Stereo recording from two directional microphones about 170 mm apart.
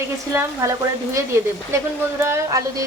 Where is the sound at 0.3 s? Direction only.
20° right (ahead or behind).